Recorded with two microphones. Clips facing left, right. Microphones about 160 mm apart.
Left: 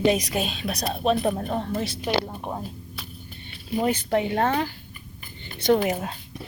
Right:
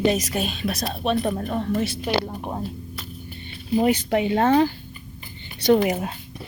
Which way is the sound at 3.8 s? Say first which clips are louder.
Right 1 dB; 15° right (ahead or behind).